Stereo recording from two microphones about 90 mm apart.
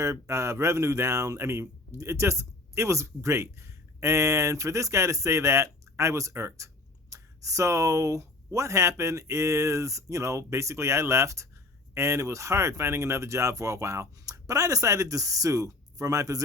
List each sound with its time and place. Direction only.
0.0 s speech: 35° right (ahead or behind)